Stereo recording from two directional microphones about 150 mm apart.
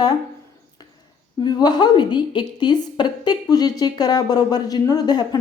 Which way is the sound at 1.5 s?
25° left (ahead or behind).